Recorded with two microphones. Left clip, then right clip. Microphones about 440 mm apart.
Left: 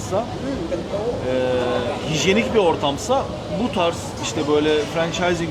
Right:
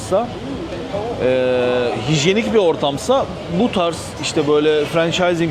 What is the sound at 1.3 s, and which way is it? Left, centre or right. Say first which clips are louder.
Speech: right 4 dB; right.